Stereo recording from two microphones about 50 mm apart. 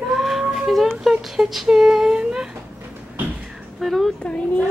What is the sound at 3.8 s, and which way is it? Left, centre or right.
Speech, centre.